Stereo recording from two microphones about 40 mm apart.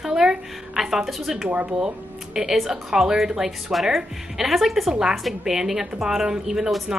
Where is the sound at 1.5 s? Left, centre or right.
Right.